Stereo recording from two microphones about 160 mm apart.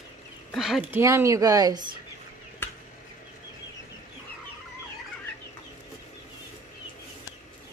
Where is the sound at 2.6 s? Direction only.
15° left (ahead or behind).